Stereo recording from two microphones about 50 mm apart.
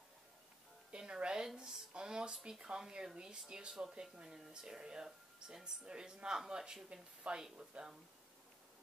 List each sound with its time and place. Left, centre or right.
0.9 s speech: centre